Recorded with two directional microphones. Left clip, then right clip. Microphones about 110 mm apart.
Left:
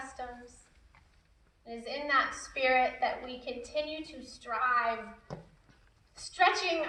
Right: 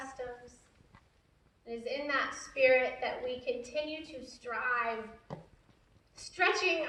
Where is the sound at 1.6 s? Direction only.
50° right (ahead or behind).